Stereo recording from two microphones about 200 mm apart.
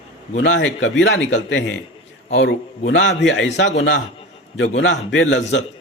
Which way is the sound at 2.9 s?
65° left (ahead or behind).